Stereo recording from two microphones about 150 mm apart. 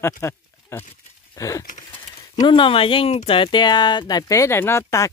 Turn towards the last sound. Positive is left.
turn(degrees=20)  # may be behind; listen again after turning